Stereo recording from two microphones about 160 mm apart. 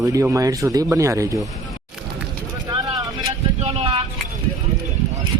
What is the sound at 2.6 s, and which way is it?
Vehicle, 25° right (ahead or behind).